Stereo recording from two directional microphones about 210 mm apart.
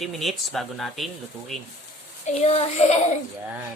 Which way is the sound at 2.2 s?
30° left (ahead or behind).